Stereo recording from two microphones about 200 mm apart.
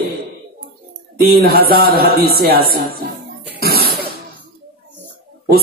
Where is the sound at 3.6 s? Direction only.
50° right (ahead or behind).